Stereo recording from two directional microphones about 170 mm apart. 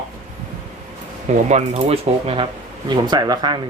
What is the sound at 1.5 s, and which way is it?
Speech, 40° right (ahead or behind).